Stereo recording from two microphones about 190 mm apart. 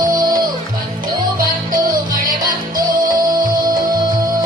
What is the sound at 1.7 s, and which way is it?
Music, 45° right (ahead or behind).